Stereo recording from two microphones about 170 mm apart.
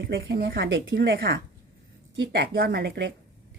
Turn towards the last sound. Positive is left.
turn(degrees=-80)